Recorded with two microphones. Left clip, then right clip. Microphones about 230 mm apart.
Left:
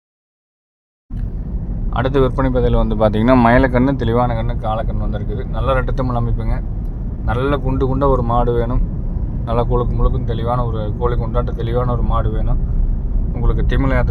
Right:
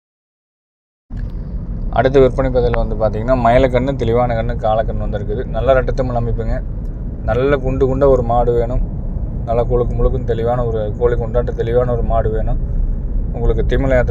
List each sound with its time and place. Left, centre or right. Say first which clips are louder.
1.9 s speech: right 6 dB; centre
3.2 s speech: left 4 dB; left
3.4 s speech: right 1 dB; centre